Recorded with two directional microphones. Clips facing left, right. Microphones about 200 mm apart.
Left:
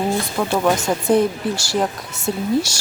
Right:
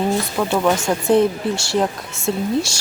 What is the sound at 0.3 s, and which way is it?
Speech, 5° left (ahead or behind).